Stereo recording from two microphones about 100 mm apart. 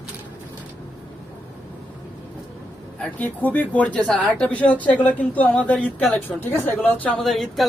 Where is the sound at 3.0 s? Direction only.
15° left (ahead or behind).